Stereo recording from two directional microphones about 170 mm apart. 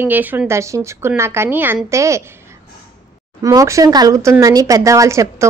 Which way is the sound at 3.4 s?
20° right (ahead or behind).